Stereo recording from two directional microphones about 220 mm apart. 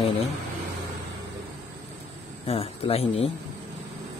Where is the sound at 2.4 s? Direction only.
25° left (ahead or behind).